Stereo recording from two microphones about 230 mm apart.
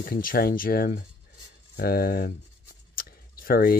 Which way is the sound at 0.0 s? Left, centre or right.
Left.